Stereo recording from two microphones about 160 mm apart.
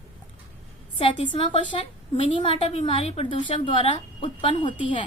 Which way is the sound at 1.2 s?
35° left (ahead or behind).